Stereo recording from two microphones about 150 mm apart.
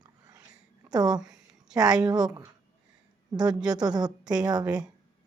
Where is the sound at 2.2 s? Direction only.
25° right (ahead or behind).